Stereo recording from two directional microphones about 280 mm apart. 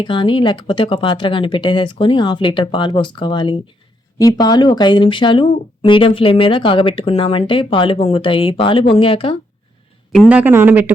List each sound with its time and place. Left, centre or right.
0.0 s speech: centre
10.2 s speech: centre